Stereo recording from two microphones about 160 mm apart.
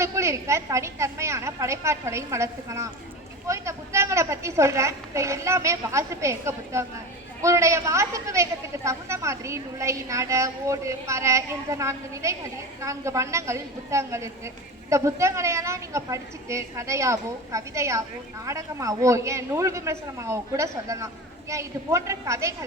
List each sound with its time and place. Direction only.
0.0 s a woman's voice: 15° right (ahead or behind)